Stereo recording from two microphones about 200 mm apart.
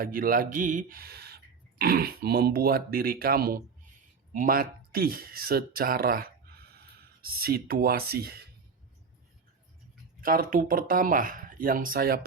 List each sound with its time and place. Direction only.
0.0 s speech: 45° right (ahead or behind)
10.2 s speech: 45° right (ahead or behind)